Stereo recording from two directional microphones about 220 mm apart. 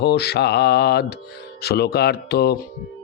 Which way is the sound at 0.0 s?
50° left (ahead or behind).